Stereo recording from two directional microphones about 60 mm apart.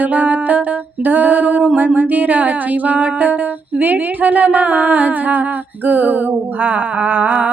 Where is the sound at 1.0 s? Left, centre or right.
Right.